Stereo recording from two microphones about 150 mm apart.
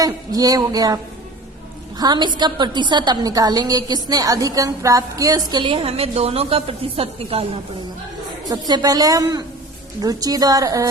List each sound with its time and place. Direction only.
0.0 s a woman's voice: 25° right (ahead or behind)
2.0 s a woman's voice: 30° right (ahead or behind)
8.4 s a woman's voice: 25° right (ahead or behind)